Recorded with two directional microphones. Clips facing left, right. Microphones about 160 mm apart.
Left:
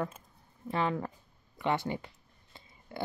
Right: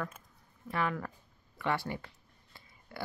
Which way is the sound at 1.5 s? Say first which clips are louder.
Left 3 dB; 20° left (ahead or behind).